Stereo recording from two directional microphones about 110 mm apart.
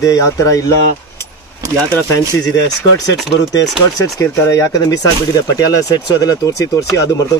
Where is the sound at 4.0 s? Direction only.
25° left (ahead or behind).